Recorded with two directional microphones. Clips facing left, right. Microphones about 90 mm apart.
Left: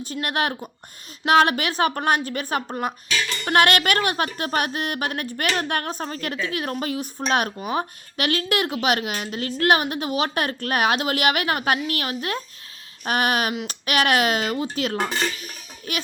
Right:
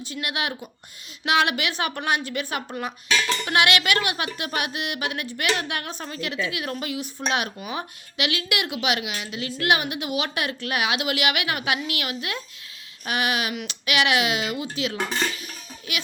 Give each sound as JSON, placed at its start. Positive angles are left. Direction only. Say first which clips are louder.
{"t": 0.0, "sound": "speech", "louder": "left 4 dB", "side_deg": 45}